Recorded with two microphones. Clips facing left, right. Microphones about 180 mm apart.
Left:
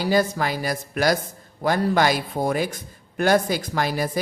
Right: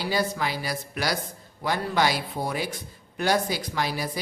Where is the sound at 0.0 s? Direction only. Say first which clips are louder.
Left 5 dB; 50° left (ahead or behind).